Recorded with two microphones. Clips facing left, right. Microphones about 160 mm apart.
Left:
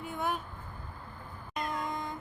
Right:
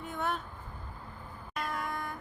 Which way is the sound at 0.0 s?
10° left (ahead or behind).